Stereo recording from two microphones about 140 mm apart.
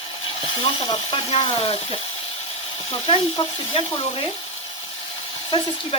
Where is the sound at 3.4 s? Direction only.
35° left (ahead or behind).